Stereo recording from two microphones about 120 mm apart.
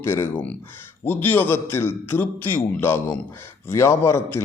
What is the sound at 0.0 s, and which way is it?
A man's voice, 20° left (ahead or behind).